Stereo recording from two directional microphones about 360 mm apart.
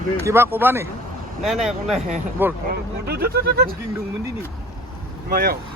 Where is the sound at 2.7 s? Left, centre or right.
Right.